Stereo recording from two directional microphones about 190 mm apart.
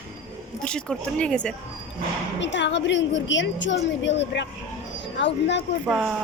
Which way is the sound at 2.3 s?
70° left (ahead or behind).